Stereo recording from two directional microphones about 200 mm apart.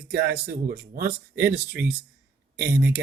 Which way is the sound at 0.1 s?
50° right (ahead or behind).